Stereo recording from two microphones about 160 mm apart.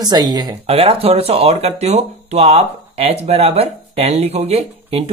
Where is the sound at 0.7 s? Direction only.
35° right (ahead or behind).